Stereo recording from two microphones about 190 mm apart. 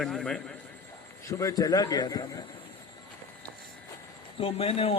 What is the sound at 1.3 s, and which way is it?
A man's voice, 15° left (ahead or behind).